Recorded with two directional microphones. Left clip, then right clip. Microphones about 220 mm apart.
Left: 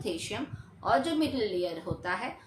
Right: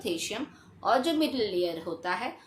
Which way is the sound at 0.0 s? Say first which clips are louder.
Right 2 dB; 20° right (ahead or behind).